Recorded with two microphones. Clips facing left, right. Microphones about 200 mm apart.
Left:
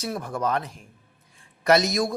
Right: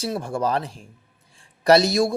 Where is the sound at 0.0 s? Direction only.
30° right (ahead or behind).